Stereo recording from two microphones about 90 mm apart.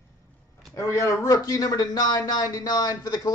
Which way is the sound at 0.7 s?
35° left (ahead or behind).